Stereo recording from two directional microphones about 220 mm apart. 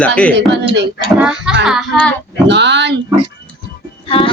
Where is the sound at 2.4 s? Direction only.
55° right (ahead or behind).